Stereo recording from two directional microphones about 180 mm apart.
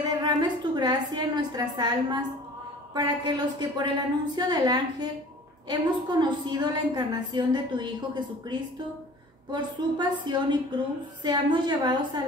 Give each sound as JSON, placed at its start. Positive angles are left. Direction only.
{"t": 0.0, "sound": "a woman's voice", "side_deg": -25}